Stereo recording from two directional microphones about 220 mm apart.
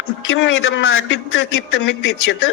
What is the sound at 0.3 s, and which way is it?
Speech, 60° left (ahead or behind).